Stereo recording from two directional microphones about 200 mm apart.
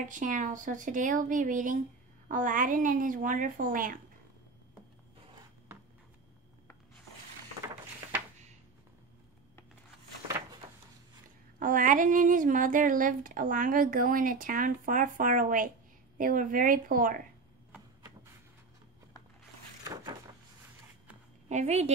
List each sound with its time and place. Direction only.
0.0 s speech: 40° right (ahead or behind)
11.6 s speech: 40° right (ahead or behind)
21.5 s speech: 35° right (ahead or behind)